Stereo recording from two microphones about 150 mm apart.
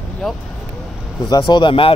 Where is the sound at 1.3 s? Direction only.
30° left (ahead or behind).